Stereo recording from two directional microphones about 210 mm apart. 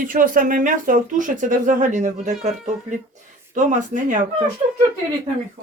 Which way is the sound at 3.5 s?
40° right (ahead or behind).